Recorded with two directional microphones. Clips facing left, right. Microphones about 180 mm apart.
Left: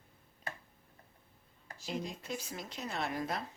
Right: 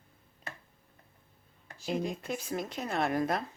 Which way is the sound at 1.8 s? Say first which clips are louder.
Right 7 dB; 55° right (ahead or behind).